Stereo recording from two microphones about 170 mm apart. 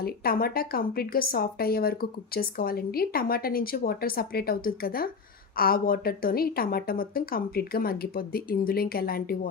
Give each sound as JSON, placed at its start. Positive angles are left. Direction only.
{"t": 0.0, "sound": "a woman's voice", "side_deg": 60}